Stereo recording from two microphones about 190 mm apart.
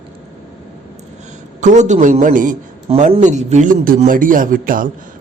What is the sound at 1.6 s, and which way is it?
A man's voice, 40° right (ahead or behind).